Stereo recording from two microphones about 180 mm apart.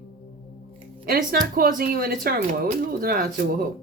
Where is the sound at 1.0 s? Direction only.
50° right (ahead or behind).